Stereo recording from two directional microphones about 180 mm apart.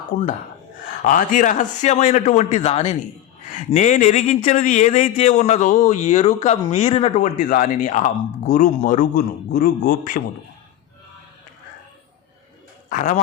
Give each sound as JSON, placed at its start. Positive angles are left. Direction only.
{"t": 1.0, "sound": "a man's voice", "side_deg": 45}
{"t": 12.9, "sound": "a man's voice", "side_deg": 45}